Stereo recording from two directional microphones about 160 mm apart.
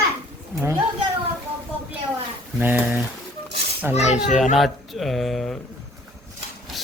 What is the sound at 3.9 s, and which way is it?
Speech, 45° left (ahead or behind).